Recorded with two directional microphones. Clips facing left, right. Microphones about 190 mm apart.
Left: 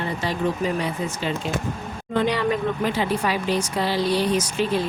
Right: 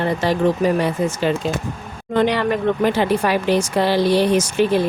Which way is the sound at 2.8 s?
65° right (ahead or behind).